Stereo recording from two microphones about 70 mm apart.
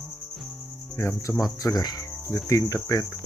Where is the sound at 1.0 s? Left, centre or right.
Left.